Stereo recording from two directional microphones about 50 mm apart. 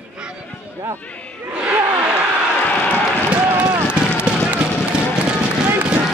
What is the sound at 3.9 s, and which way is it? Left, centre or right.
Run, right.